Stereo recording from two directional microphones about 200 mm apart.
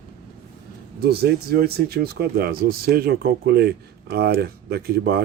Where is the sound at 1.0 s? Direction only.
50° right (ahead or behind).